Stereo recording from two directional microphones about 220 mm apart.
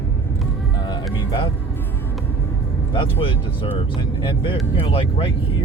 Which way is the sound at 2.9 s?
25° left (ahead or behind).